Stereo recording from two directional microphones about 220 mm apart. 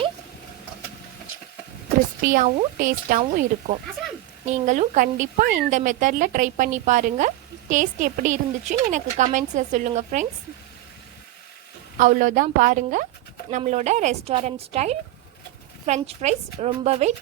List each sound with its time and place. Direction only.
2.2 s a woman's voice: 35° right (ahead or behind)
4.4 s a woman's voice: 35° right (ahead or behind)
11.9 s a woman's voice: 35° right (ahead or behind)